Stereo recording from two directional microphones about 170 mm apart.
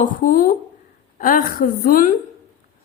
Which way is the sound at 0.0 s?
50° left (ahead or behind).